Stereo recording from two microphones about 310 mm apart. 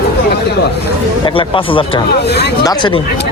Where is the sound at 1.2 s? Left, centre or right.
Centre.